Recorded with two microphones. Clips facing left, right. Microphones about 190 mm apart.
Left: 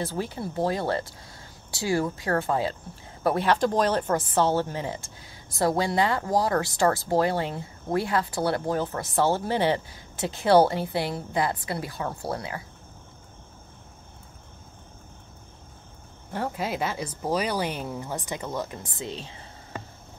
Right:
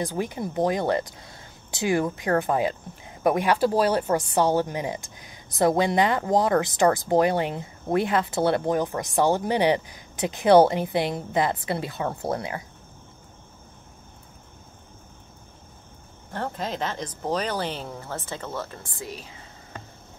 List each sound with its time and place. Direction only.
0.0 s speech: 15° right (ahead or behind)
16.3 s speech: 10° left (ahead or behind); by 19.3 s 25° left (ahead or behind)